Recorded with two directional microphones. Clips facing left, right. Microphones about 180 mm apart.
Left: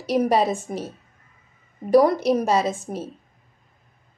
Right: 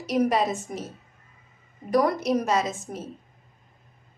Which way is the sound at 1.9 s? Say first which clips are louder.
Left 6 dB; 30° left (ahead or behind).